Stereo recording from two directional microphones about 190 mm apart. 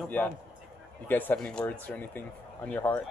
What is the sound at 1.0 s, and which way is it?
Speech, 10° left (ahead or behind).